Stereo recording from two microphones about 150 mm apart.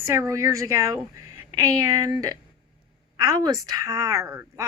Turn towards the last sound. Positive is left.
turn(degrees=-15)  # may be behind; listen again after turning